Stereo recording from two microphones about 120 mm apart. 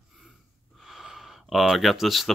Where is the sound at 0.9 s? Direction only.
5° right (ahead or behind).